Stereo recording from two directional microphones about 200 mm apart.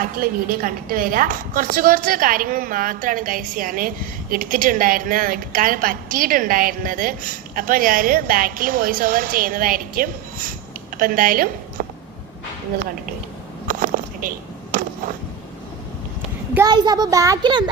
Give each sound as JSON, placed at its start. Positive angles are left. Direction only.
{"t": 0.0, "sound": "a woman's voice", "side_deg": -45}
{"t": 13.7, "sound": "a sound", "side_deg": -45}
{"t": 16.6, "sound": "a child's voice", "side_deg": -20}